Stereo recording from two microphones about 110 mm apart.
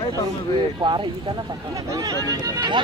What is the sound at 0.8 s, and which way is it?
Speech, 45° right (ahead or behind).